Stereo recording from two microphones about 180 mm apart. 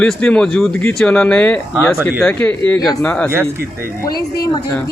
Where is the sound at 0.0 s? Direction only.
5° left (ahead or behind).